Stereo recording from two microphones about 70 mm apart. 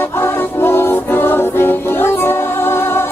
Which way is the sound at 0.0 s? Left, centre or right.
Left.